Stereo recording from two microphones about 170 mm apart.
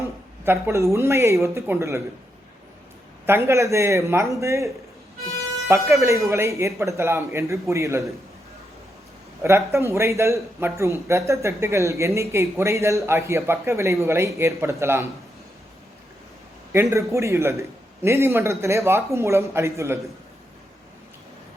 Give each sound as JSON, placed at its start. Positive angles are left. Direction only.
{"t": 0.4, "sound": "a man's voice", "side_deg": -10}
{"t": 3.2, "sound": "a man's voice", "side_deg": -15}
{"t": 9.4, "sound": "a man's voice", "side_deg": -15}
{"t": 16.7, "sound": "a man's voice", "side_deg": -15}